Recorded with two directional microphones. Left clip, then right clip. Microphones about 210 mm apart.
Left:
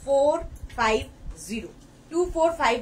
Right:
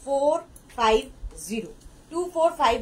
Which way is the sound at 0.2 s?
15° left (ahead or behind).